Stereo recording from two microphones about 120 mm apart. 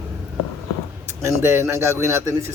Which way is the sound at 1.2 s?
25° right (ahead or behind).